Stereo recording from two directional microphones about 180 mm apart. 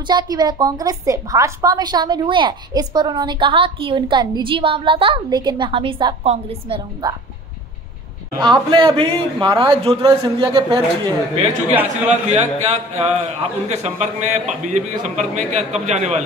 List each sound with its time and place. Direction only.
0.0 s a woman's voice: 25° right (ahead or behind)
7.0 s a woman's voice: 20° right (ahead or behind)
8.4 s a woman's voice: 25° right (ahead or behind)
12.3 s a man's voice: 35° right (ahead or behind)